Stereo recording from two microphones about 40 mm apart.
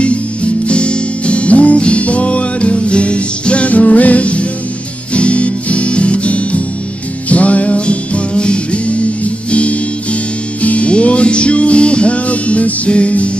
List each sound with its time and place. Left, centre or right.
0.0 s music: left